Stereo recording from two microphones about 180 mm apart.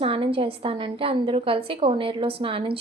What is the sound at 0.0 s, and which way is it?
A woman's voice, 30° right (ahead or behind).